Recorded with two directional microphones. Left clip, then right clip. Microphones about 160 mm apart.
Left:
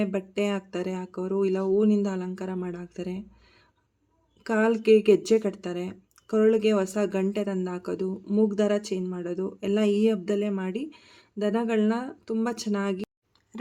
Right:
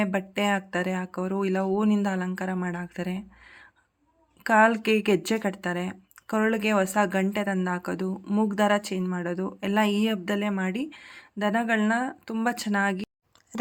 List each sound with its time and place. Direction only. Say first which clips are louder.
0.0 s speech: right 1 dB; 15° right (ahead or behind)
13.5 s chewing: right 9 dB; 30° right (ahead or behind)